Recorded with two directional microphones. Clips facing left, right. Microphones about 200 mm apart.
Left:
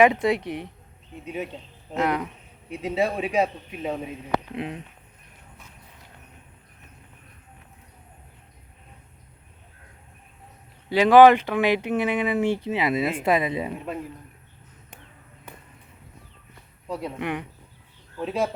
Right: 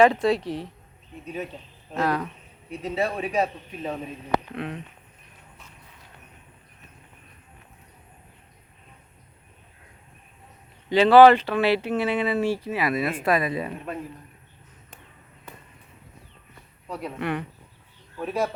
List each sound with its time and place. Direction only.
0.0 s speech: 20° left (ahead or behind)
10.8 s speech: 10° left (ahead or behind)
16.9 s speech: 20° left (ahead or behind)